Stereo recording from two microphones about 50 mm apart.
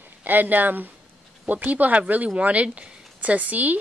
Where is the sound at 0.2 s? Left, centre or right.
Right.